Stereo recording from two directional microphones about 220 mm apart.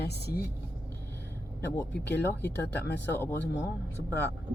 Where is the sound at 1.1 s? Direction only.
10° left (ahead or behind).